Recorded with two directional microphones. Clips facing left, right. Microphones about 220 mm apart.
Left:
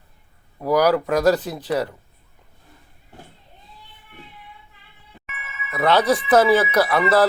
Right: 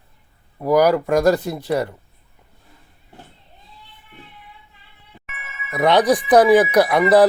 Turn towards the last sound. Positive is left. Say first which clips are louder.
# right 4 dB
turn(degrees=-15)  # may be behind; listen again after turning